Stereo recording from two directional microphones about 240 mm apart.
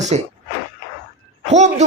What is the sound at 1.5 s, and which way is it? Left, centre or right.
Speech, right.